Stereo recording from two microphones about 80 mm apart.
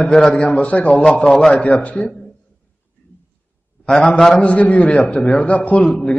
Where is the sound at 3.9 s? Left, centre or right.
Centre.